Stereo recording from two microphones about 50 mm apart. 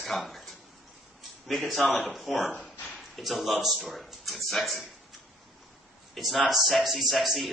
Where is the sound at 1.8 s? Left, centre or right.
Left.